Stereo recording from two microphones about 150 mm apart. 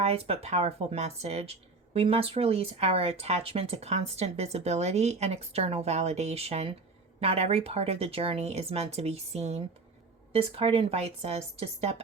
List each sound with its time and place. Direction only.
0.0 s speech: 45° right (ahead or behind)